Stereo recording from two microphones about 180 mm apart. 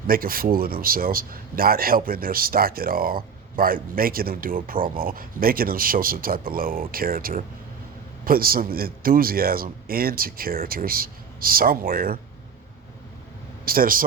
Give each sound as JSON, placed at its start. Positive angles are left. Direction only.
{"t": 0.1, "sound": "speech", "side_deg": -55}
{"t": 13.7, "sound": "speech", "side_deg": -50}